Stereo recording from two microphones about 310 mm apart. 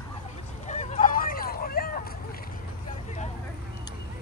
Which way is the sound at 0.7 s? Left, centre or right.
Left.